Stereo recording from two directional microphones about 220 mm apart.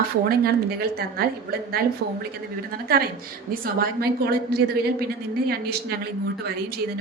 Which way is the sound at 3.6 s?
45° right (ahead or behind).